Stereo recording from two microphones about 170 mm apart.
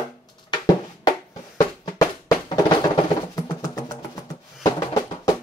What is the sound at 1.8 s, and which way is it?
Music, 20° left (ahead or behind).